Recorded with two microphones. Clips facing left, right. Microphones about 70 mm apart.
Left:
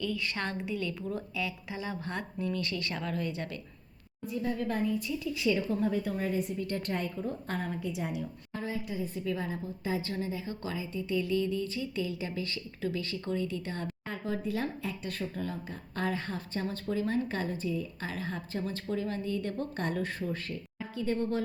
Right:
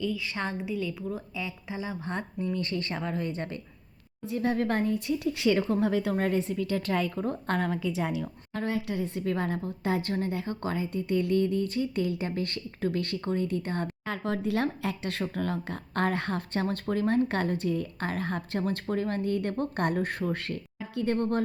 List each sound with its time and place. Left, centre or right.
0.0 s a woman's voice: centre
1.4 s speech: right
4.3 s a woman's voice: right
9.2 s a woman's voice: right
13.2 s a woman's voice: right
14.1 s a woman's voice: right